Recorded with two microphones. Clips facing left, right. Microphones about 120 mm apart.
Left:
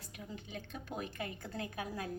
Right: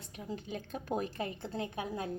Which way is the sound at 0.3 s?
40° right (ahead or behind).